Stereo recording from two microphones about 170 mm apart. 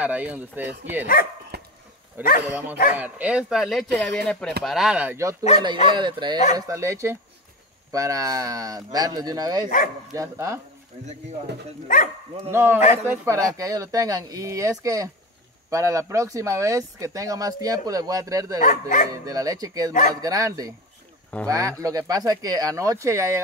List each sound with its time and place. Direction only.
0.0 s speech: 10° right (ahead or behind)
1.5 s dog: 75° right (ahead or behind)
2.4 s speech: 10° right (ahead or behind)
5.9 s speech: 25° right (ahead or behind)
12.4 s speech: 15° right (ahead or behind)
18.6 s speech: 50° left (ahead or behind)
19.2 s speech: 20° right (ahead or behind)
19.9 s speech: 45° left (ahead or behind)
20.2 s speech: 20° right (ahead or behind)